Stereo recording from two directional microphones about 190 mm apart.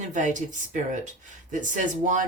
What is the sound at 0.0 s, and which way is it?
Speech, 40° right (ahead or behind).